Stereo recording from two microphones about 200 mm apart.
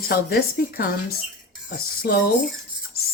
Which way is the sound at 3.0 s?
50° left (ahead or behind).